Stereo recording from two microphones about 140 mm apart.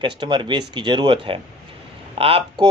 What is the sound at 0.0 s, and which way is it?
Speech, 35° right (ahead or behind).